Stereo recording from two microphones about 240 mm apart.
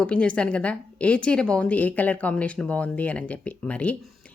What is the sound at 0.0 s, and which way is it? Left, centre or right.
A woman's voice, centre.